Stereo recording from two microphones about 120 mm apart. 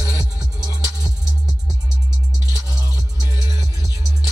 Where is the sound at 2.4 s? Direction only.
30° left (ahead or behind).